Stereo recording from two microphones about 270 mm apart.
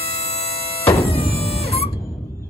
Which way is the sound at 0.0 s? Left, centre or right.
Left.